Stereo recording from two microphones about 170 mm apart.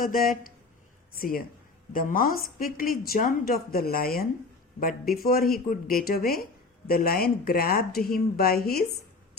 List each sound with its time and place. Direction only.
0.0 s speech: 55° left (ahead or behind)